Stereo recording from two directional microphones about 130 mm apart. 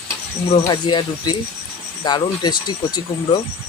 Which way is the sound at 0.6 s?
35° left (ahead or behind).